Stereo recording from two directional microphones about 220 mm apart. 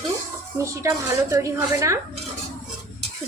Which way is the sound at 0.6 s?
15° right (ahead or behind).